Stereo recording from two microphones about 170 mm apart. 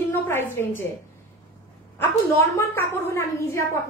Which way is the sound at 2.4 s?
15° left (ahead or behind).